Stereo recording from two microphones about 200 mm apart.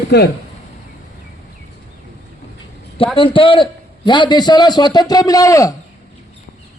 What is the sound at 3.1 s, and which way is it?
A man's voice, 25° left (ahead or behind).